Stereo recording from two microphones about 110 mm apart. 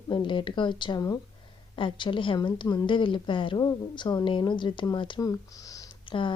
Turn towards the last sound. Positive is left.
turn(degrees=50)  # may be behind; listen again after turning